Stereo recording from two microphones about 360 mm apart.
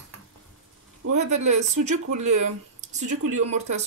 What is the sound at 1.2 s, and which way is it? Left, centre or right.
Speech, centre.